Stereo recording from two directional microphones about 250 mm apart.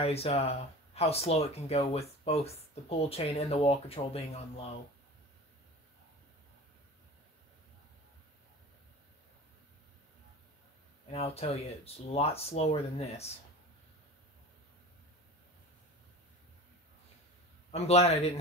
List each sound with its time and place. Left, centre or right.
0.0 s speech: left
11.1 s speech: left
17.6 s speech: left